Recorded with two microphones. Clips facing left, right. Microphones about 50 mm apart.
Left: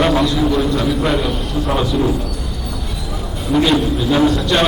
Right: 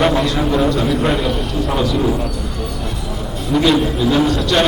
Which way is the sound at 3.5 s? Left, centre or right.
Centre.